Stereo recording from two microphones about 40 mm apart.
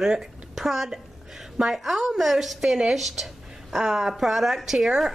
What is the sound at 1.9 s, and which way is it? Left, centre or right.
A woman's voice, centre.